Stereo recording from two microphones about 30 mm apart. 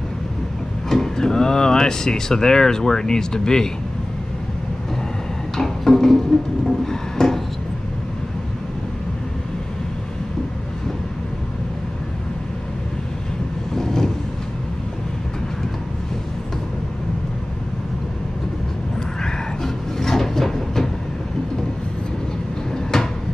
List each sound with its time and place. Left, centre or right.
0.8 s speech: centre
5.6 s a sound: centre
13.7 s vehicle: centre
19.6 s wood: centre
22.9 s train: centre